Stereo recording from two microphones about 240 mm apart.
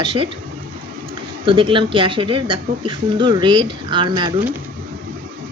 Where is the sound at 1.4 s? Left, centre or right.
Right.